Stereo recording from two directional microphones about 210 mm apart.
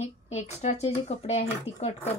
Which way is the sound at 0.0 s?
30° left (ahead or behind).